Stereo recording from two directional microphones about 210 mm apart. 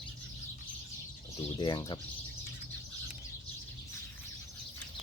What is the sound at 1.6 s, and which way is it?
Speech, 20° left (ahead or behind).